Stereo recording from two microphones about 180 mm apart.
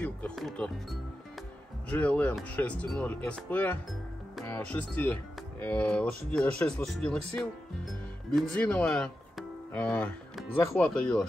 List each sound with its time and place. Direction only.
0.0 s speech: 5° left (ahead or behind)